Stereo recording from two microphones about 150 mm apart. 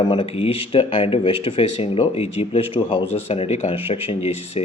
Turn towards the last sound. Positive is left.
turn(degrees=40)  # may be behind; listen again after turning